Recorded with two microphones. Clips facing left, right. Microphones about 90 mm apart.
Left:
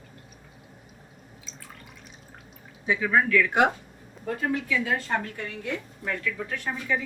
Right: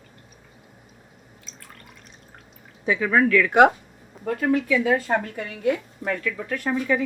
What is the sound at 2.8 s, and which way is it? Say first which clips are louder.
Speech: right 3 dB; 75° right (ahead or behind).